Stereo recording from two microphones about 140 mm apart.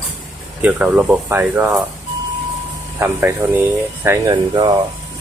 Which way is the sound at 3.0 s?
15° right (ahead or behind).